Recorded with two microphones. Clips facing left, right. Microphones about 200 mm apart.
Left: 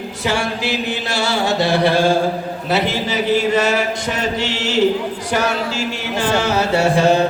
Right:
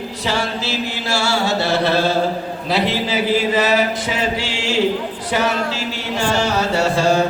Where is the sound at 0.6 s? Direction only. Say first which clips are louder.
Left 2 dB; 15° left (ahead or behind).